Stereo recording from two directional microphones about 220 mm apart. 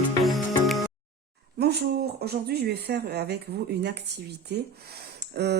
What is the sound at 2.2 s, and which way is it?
Speech, 45° right (ahead or behind).